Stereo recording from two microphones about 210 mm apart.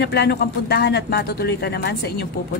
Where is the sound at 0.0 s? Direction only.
50° left (ahead or behind).